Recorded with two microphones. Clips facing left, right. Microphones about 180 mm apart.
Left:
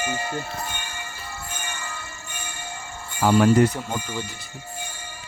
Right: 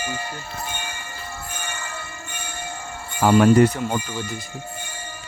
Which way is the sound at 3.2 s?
70° right (ahead or behind).